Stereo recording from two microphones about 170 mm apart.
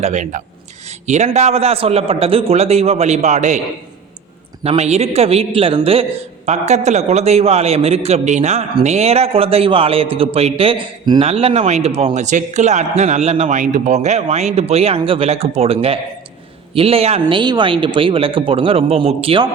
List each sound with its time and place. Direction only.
0.0 s a man's voice: 45° right (ahead or behind)
4.6 s a man's voice: 40° right (ahead or behind)
11.3 s a man's voice: 40° right (ahead or behind)